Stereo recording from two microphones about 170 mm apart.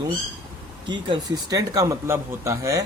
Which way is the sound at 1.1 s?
20° right (ahead or behind).